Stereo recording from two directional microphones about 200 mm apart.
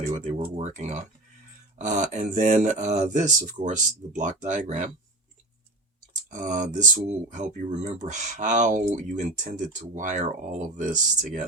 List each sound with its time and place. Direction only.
0.1 s speech: 30° right (ahead or behind)
6.3 s speech: 40° right (ahead or behind)